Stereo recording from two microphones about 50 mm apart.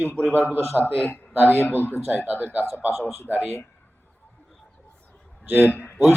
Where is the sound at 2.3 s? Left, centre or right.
Right.